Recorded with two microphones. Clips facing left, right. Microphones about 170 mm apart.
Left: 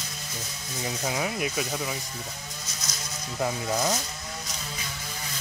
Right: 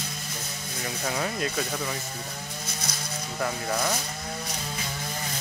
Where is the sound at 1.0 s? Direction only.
10° left (ahead or behind).